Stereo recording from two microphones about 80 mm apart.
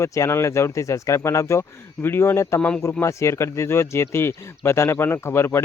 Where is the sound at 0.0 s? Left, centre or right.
Left.